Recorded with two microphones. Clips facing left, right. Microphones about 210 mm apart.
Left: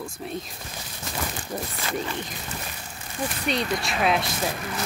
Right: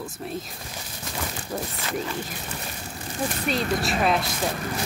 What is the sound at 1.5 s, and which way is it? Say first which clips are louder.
Speech: right 2 dB; 5° left (ahead or behind).